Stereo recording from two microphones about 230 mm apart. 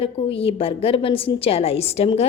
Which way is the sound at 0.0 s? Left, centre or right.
Left.